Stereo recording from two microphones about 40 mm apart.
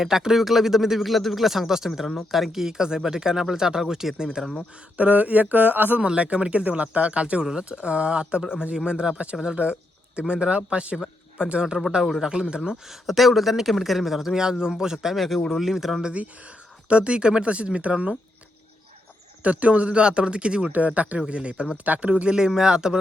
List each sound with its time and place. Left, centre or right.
0.0 s speech: centre
4.9 s speech: right
6.0 s speech: right
12.9 s speech: centre
15.1 s speech: centre
16.9 s speech: right
19.4 s speech: right
20.7 s speech: right
21.2 s speech: right
22.4 s speech: centre